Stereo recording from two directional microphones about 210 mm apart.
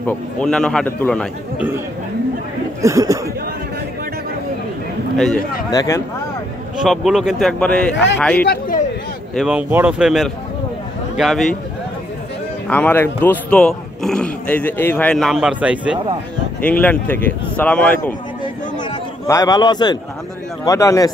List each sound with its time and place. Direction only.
0.0 s speech: 5° left (ahead or behind)
2.8 s speech: 15° right (ahead or behind)
5.1 s speech: centre (ahead or behind)
5.7 s speech: 15° left (ahead or behind)
6.8 s speech: centre (ahead or behind)
8.5 s a sound: 40° left (ahead or behind)
9.3 s speech: 5° right (ahead or behind)
12.6 s speech: 5° left (ahead or behind)
16.6 s speech: 5° left (ahead or behind)
19.2 s a man's voice: 15° left (ahead or behind)